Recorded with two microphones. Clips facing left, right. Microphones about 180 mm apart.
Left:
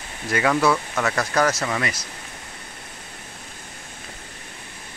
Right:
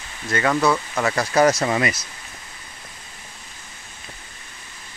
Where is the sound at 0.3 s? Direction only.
5° left (ahead or behind).